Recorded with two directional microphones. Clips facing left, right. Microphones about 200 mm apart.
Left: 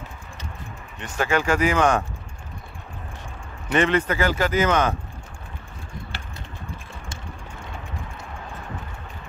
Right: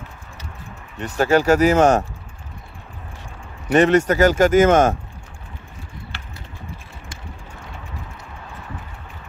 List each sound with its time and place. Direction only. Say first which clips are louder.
1.0 s speech: right 6 dB; 40° right (ahead or behind)
3.6 s speech: right 6 dB; 40° right (ahead or behind)